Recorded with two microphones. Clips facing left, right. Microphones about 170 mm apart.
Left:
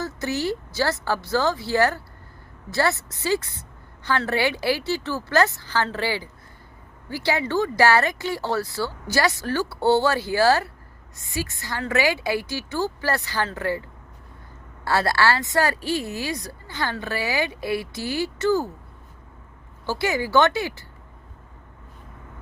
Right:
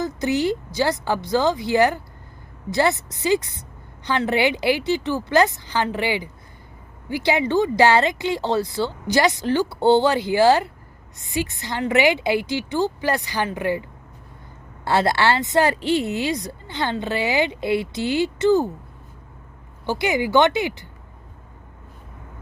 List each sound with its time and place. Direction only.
0.0 s a woman's voice: 15° right (ahead or behind)
14.8 s speech: 20° right (ahead or behind)
19.8 s a woman's voice: 20° right (ahead or behind)